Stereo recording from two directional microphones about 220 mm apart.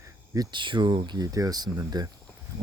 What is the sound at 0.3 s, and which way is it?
Speech, 20° right (ahead or behind).